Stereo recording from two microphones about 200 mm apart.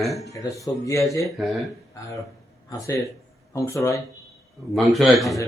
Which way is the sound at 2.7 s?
15° left (ahead or behind).